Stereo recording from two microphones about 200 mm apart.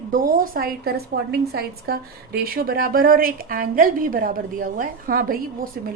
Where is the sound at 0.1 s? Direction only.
45° right (ahead or behind).